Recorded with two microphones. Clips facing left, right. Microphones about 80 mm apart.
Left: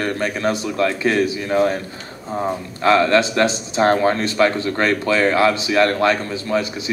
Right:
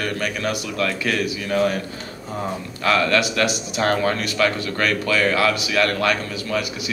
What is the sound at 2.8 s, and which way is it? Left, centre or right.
Speech, left.